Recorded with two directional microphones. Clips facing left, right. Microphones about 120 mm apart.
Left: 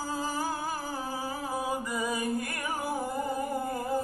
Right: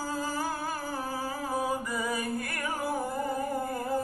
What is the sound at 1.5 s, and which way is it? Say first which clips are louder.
Music: right 2 dB; 20° left (ahead or behind).